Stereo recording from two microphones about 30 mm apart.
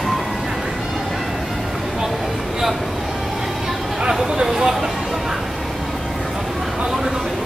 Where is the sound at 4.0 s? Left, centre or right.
Right.